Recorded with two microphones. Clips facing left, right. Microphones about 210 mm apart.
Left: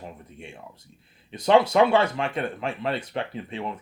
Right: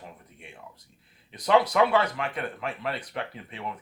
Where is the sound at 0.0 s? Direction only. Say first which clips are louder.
Left 6 dB; 25° left (ahead or behind).